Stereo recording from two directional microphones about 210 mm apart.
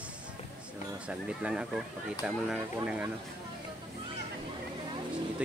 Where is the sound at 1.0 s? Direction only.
5° right (ahead or behind).